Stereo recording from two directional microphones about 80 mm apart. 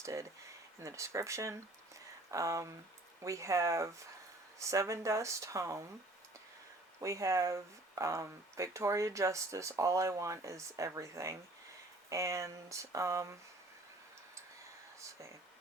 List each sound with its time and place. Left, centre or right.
0.0 s speech: right
7.0 s speech: right